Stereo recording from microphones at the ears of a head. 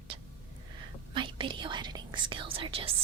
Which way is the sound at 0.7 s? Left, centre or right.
Right.